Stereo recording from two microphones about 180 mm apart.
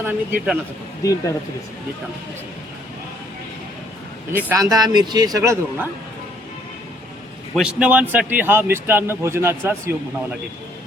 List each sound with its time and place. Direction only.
0.0 s speech: 10° right (ahead or behind)
4.3 s speech: 15° right (ahead or behind)
7.5 s speech: 5° right (ahead or behind)